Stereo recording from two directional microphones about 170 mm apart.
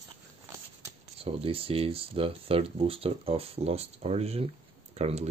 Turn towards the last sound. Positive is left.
turn(degrees=-40)  # may be behind; listen again after turning